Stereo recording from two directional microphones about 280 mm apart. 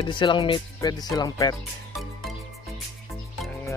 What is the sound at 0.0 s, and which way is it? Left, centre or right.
Speech, centre.